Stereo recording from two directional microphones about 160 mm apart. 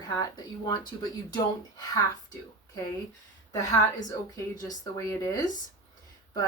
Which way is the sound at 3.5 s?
20° left (ahead or behind).